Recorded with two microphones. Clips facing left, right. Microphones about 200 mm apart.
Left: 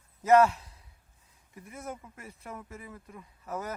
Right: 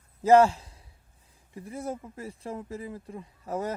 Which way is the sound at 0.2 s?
30° right (ahead or behind).